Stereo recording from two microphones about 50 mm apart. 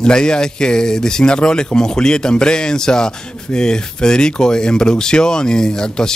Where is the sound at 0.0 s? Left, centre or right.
Centre.